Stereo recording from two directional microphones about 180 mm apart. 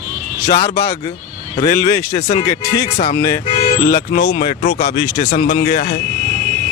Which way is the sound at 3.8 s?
60° left (ahead or behind).